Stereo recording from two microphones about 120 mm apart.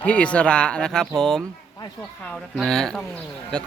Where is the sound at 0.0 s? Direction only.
10° left (ahead or behind).